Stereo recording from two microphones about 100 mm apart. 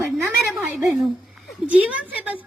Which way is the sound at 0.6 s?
15° right (ahead or behind).